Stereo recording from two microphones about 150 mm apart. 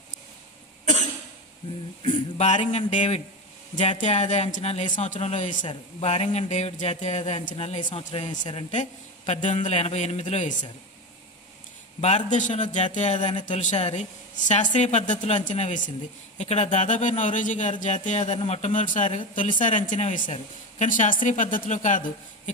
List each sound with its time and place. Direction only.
2.3 s a woman's voice: 50° left (ahead or behind)
5.6 s a woman's voice: 35° left (ahead or behind)
8.3 s speech: 30° left (ahead or behind)
8.7 s a woman's voice: 45° left (ahead or behind)
12.0 s a woman's voice: 50° left (ahead or behind)